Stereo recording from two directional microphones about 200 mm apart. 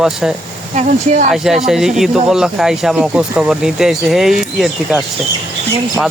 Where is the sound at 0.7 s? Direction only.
35° right (ahead or behind).